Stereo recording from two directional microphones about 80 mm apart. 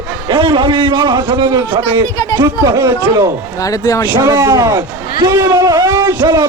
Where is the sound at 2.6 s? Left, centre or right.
Right.